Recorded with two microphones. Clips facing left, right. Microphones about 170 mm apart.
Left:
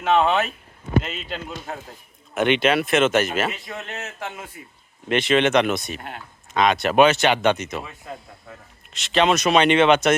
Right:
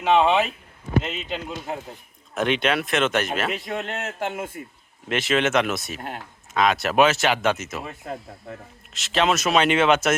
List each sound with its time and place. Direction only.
0.0 s speech: 5° right (ahead or behind)
3.5 s a man's voice: 60° right (ahead or behind)
5.0 s speech: centre (ahead or behind)
6.0 s speech: 40° right (ahead or behind)
6.5 s speech: centre (ahead or behind)
7.9 s speech: 50° right (ahead or behind)
8.9 s speech: centre (ahead or behind)